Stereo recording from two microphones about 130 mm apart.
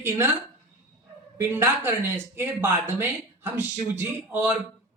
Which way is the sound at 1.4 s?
20° right (ahead or behind).